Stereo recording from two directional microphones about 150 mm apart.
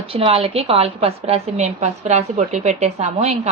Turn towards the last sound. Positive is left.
turn(degrees=-50)  # may be behind; listen again after turning